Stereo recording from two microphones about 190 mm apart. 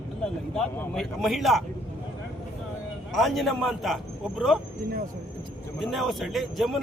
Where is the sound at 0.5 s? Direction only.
5° left (ahead or behind).